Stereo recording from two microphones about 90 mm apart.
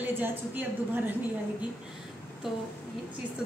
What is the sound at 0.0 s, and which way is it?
A woman's voice, 20° right (ahead or behind).